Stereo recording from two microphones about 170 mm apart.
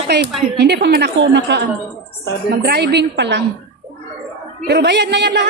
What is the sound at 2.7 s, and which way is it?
Speech, 70° right (ahead or behind).